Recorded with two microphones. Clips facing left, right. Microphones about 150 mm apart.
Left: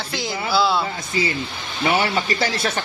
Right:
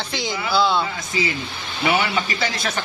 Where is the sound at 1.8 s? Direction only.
35° left (ahead or behind).